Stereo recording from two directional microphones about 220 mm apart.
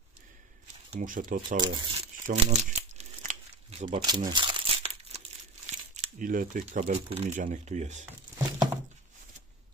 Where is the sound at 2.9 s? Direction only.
30° right (ahead or behind).